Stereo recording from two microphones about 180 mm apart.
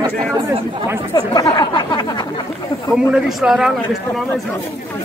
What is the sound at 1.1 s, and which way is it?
Speech, 20° left (ahead or behind).